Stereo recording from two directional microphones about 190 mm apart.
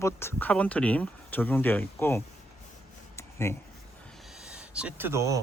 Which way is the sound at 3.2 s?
15° left (ahead or behind).